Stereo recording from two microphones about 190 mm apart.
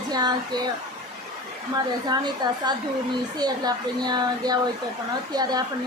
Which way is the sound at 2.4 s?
20° right (ahead or behind).